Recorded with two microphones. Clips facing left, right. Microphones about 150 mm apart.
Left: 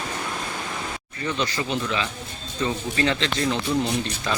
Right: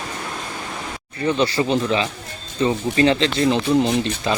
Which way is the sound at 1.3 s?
30° right (ahead or behind).